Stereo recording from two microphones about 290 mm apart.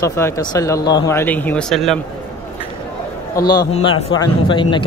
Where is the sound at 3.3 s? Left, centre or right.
Centre.